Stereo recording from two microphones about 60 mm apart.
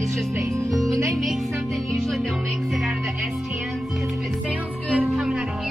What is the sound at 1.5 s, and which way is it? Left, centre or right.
Speech, right.